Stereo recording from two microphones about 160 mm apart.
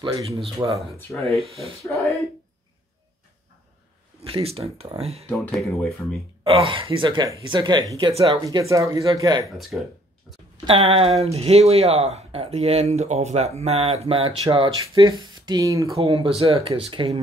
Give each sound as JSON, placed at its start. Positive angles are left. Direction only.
{"t": 0.0, "sound": "speech", "side_deg": -35}
{"t": 0.6, "sound": "speech", "side_deg": -20}
{"t": 1.2, "sound": "speech", "side_deg": -40}
{"t": 1.9, "sound": "speech", "side_deg": 20}
{"t": 4.2, "sound": "speech", "side_deg": -35}
{"t": 5.4, "sound": "speech", "side_deg": 5}
{"t": 6.4, "sound": "speech", "side_deg": -35}
{"t": 9.6, "sound": "speech", "side_deg": 0}
{"t": 10.6, "sound": "speech", "side_deg": -35}
{"t": 14.4, "sound": "speech", "side_deg": -25}
{"t": 16.0, "sound": "speech", "side_deg": -35}